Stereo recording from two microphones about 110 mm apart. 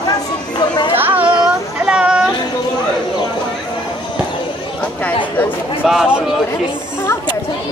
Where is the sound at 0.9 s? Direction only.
15° right (ahead or behind).